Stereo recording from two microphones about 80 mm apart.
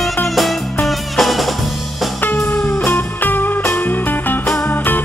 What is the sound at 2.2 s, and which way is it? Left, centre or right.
Music, left.